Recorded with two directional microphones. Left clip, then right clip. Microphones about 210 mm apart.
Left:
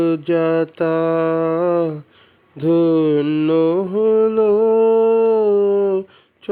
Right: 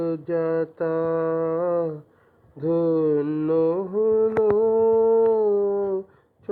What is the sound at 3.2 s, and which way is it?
Mantra, 25° left (ahead or behind).